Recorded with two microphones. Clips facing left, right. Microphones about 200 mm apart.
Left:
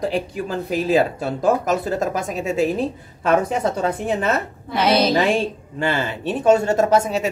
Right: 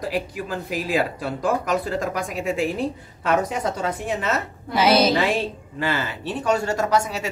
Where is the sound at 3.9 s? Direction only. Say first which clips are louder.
Left 4 dB; 55° left (ahead or behind).